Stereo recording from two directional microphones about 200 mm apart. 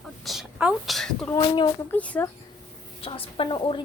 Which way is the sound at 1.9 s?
5° left (ahead or behind).